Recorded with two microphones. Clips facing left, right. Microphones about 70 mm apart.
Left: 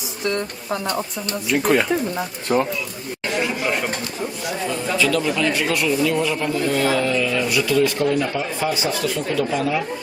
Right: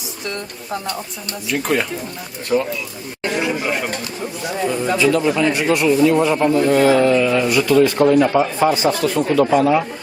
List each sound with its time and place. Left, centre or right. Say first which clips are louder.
1.5 s speech: left 1 dB; centre
2.5 s speech: right 1 dB; left
3.7 s speech: right 1 dB; centre
4.7 s a man's voice: right 4 dB; right
8.7 s speech: right 5 dB; right